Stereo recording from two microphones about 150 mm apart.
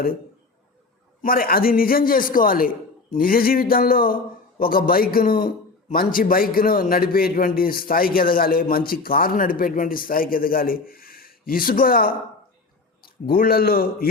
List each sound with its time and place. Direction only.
1.2 s a man's voice: 75° left (ahead or behind)
13.2 s a man's voice: 80° left